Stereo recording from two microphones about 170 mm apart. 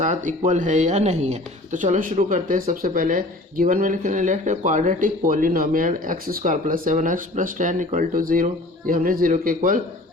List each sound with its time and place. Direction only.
0.0 s a man's voice: 50° right (ahead or behind)